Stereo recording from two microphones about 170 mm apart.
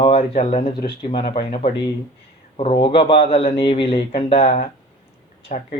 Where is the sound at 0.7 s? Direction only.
30° left (ahead or behind).